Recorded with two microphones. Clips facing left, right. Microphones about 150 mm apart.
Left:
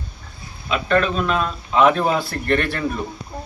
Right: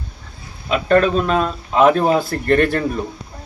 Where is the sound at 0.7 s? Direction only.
40° right (ahead or behind).